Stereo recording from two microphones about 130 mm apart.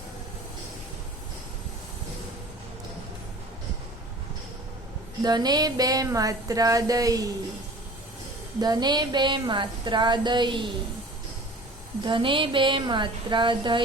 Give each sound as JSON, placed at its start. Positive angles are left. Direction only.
{"t": 5.2, "sound": "a sound", "side_deg": -30}
{"t": 8.6, "sound": "speech", "side_deg": -30}
{"t": 12.0, "sound": "speech", "side_deg": -40}